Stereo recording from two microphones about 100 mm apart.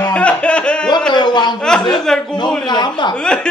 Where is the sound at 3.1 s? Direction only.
10° left (ahead or behind).